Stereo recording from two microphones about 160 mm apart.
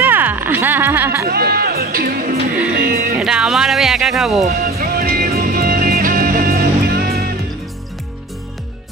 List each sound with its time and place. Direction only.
0.0 s music: 10° right (ahead or behind)
1.2 s speech: 70° right (ahead or behind)
3.2 s speech: 5° right (ahead or behind)
4.4 s music: 70° right (ahead or behind)